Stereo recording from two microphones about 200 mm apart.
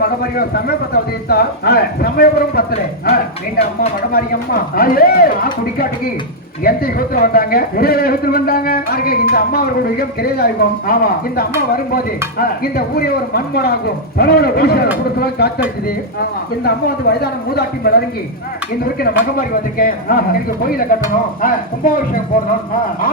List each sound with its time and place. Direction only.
0.0 s a man's voice: 50° left (ahead or behind)
4.1 s a man's voice: 50° left (ahead or behind)
16.6 s a man's voice: 50° left (ahead or behind)
19.0 s a man's voice: 50° left (ahead or behind)
21.4 s a man's voice: 45° left (ahead or behind)